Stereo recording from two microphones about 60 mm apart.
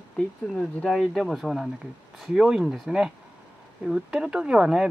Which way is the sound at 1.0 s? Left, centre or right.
Centre.